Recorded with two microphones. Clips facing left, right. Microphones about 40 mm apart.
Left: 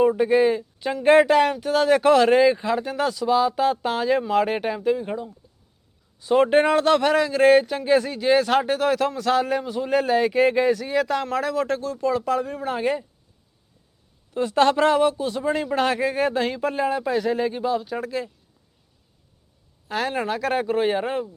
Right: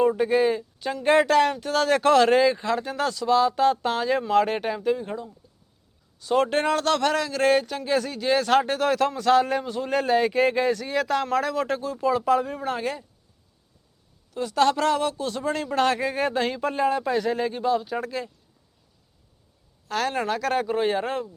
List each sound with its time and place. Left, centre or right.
0.0 s speech: centre
12.8 s speech: centre
14.3 s speech: left; by 18.3 s centre
19.9 s speech: centre